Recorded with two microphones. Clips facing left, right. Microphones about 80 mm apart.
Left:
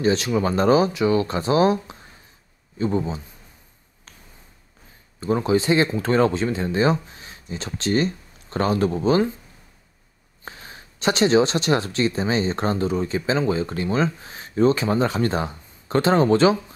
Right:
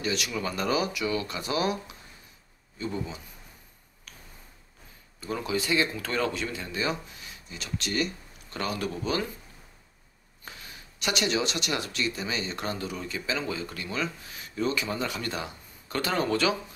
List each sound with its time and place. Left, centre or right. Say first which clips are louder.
0.0 s speech: left 10 dB; left
5.2 s speech: left 10 dB; left
10.4 s speech: left 6 dB; left